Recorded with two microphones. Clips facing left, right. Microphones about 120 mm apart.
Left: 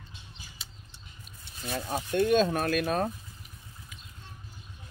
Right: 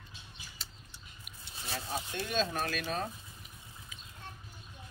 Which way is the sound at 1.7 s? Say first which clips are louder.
Left 7 dB; 50° left (ahead or behind).